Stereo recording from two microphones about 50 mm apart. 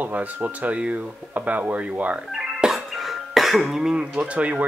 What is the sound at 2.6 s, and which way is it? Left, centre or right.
Music, centre.